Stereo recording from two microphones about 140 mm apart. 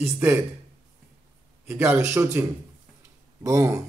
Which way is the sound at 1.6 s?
15° right (ahead or behind).